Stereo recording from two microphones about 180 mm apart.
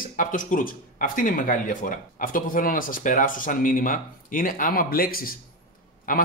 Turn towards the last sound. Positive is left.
turn(degrees=50)  # may be behind; listen again after turning